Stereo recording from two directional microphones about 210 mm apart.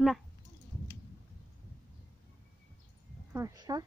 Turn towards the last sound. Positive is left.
turn(degrees=-20)  # may be behind; listen again after turning